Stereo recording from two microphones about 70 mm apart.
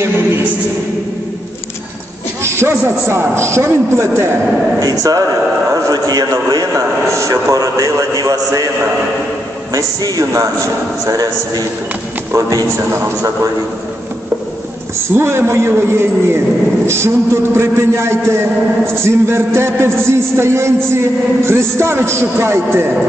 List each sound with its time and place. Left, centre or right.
2.4 s a sound: right
3.1 s a man's voice: right
4.7 s a man's voice: right
6.7 s a man's voice: right
9.8 s a man's voice: right
12.4 s a man's voice: right
12.7 s a man's voice: right
15.1 s a man's voice: right